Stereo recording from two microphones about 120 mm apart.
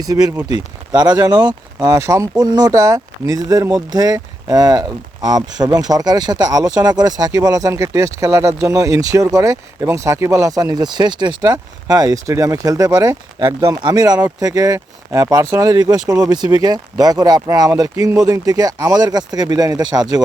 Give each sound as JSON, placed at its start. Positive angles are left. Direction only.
{"t": 0.0, "sound": "speech", "side_deg": -30}